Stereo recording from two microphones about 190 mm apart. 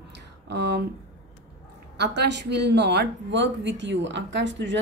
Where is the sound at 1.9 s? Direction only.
65° right (ahead or behind).